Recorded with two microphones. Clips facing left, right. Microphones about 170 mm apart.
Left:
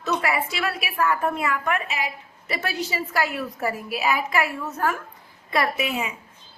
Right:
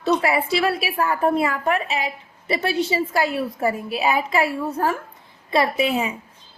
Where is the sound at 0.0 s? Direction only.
30° right (ahead or behind).